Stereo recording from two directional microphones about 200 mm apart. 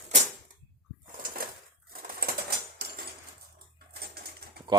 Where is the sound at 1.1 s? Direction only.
45° right (ahead or behind).